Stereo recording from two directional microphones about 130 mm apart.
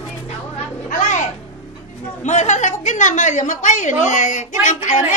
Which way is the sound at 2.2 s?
65° left (ahead or behind).